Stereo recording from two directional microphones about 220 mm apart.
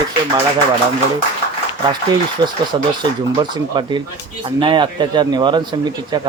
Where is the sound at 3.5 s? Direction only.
20° right (ahead or behind).